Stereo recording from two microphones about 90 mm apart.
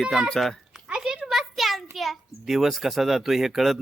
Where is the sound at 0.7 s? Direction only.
10° right (ahead or behind).